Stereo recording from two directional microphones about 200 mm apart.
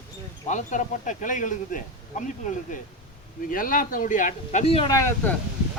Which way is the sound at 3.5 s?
45° left (ahead or behind).